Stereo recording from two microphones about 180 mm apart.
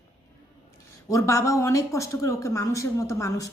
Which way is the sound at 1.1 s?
15° left (ahead or behind).